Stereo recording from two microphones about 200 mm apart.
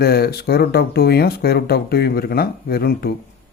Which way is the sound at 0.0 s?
50° left (ahead or behind).